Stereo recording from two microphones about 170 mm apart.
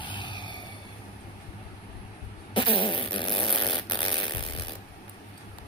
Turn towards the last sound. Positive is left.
turn(degrees=30)  # may be behind; listen again after turning